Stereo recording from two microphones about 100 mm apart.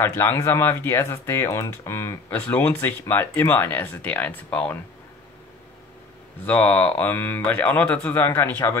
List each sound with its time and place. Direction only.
0.0 s speech: 25° left (ahead or behind)
6.4 s speech: 15° left (ahead or behind)